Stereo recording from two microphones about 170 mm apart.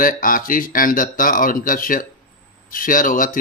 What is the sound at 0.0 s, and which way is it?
A man's voice, 55° left (ahead or behind).